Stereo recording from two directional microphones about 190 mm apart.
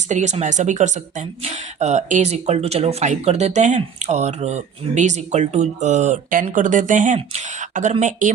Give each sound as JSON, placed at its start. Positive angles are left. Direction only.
{"t": 0.1, "sound": "speech", "side_deg": -40}